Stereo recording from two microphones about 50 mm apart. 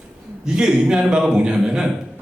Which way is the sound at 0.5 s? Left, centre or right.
Centre.